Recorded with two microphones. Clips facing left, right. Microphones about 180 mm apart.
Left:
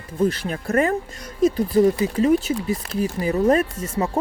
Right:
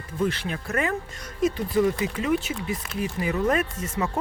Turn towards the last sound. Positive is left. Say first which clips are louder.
# left 4 dB
turn(degrees=35)  # may be behind; listen again after turning